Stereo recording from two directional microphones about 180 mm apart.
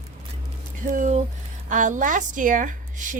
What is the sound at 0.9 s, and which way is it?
Speech, 45° right (ahead or behind).